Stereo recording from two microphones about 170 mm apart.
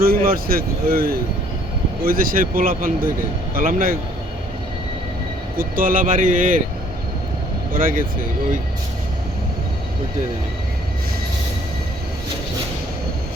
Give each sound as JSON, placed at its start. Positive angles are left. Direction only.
{"t": 0.0, "sound": "speech", "side_deg": -60}
{"t": 5.5, "sound": "speech", "side_deg": -55}
{"t": 7.7, "sound": "speech", "side_deg": -55}